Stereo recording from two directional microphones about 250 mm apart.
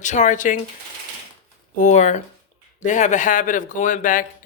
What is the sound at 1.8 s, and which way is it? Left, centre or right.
Speech, left.